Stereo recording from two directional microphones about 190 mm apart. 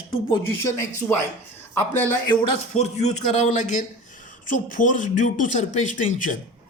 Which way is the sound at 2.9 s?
35° left (ahead or behind).